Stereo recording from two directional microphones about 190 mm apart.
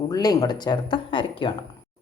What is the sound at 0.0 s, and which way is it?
Speech, 20° left (ahead or behind).